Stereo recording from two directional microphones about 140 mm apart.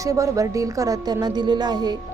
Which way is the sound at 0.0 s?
25° right (ahead or behind).